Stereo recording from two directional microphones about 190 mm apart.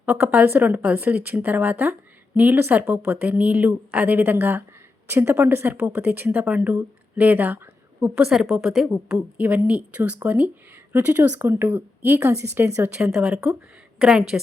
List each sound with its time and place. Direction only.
0.0 s a woman's voice: 10° right (ahead or behind)